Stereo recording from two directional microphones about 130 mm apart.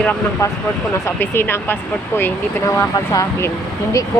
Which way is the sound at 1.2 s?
15° left (ahead or behind).